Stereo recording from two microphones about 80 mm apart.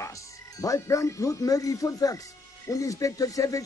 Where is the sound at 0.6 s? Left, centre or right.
Left.